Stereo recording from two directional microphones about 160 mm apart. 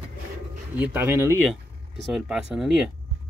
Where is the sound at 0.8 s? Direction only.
10° right (ahead or behind).